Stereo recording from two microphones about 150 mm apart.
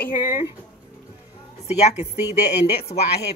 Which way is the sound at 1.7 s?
45° left (ahead or behind).